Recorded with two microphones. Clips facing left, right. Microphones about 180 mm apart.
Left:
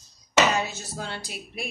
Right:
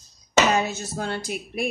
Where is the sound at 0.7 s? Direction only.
50° right (ahead or behind).